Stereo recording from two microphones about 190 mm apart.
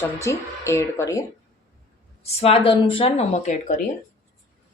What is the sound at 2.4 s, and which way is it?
A woman's voice, 30° left (ahead or behind).